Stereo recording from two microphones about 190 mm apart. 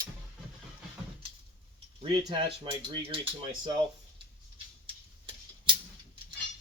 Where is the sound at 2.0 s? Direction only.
25° right (ahead or behind).